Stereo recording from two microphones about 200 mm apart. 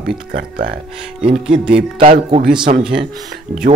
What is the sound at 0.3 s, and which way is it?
Speech, 45° right (ahead or behind).